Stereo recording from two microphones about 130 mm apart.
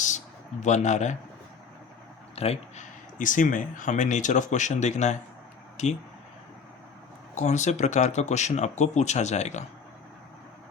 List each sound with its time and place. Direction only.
0.6 s speech: 65° left (ahead or behind)
2.3 s a sound: 50° left (ahead or behind)
3.2 s speech: 90° left; by 6.0 s 60° left (ahead or behind)
7.3 s speech: 65° left (ahead or behind)